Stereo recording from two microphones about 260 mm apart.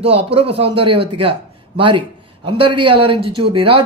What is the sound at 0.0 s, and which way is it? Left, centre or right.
A man's voice, right.